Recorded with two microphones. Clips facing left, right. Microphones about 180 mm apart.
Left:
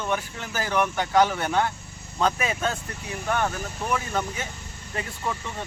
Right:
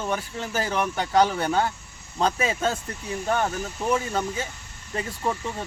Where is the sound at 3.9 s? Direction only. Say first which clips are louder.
Left 1 dB; 30° right (ahead or behind).